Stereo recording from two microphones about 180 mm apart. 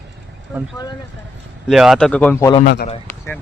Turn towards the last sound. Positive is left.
turn(degrees=10)  # may be behind; listen again after turning